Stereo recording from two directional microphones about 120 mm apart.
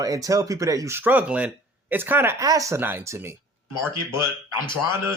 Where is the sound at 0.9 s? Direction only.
15° right (ahead or behind).